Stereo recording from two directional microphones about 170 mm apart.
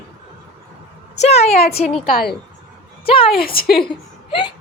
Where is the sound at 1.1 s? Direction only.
40° left (ahead or behind).